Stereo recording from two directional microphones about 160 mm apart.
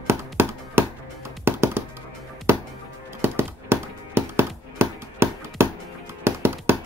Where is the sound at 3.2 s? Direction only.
15° right (ahead or behind).